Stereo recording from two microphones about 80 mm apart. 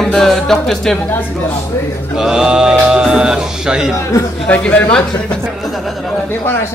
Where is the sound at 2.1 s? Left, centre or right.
Centre.